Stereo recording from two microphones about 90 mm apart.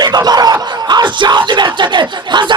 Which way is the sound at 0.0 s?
50° right (ahead or behind).